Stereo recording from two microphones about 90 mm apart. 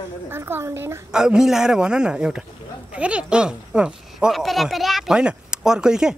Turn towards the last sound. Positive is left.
turn(degrees=-5)  # may be behind; listen again after turning